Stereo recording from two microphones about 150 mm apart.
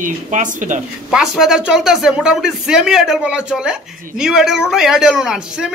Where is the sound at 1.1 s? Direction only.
5° right (ahead or behind).